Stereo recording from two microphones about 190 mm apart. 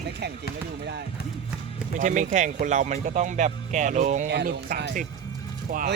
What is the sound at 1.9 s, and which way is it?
Speech, 40° right (ahead or behind).